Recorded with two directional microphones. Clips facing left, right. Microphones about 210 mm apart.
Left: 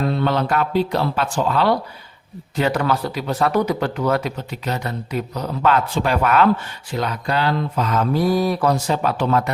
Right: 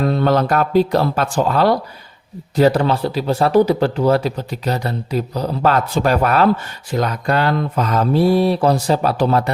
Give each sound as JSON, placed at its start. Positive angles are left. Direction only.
{"t": 0.1, "sound": "speech", "side_deg": -45}
{"t": 2.6, "sound": "speech", "side_deg": -35}